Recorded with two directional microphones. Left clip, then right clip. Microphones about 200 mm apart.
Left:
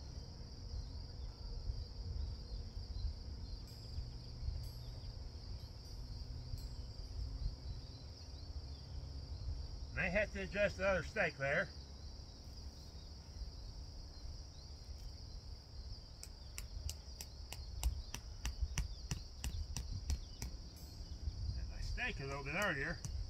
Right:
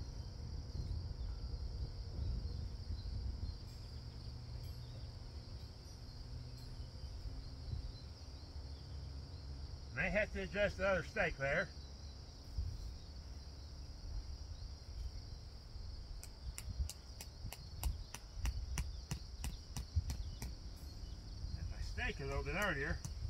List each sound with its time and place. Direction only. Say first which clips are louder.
9.9 s speech: even; 15° left (ahead or behind)
16.5 s a sound: left 1 dB; 15° left (ahead or behind)
21.9 s cricket: even; 20° left (ahead or behind)